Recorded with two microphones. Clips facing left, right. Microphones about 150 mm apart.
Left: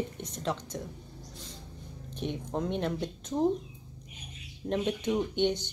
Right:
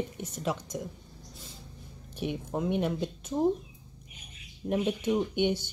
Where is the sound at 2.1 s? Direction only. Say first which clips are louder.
Right 1 dB; 10° right (ahead or behind).